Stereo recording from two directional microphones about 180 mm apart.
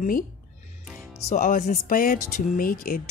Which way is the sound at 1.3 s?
45° left (ahead or behind).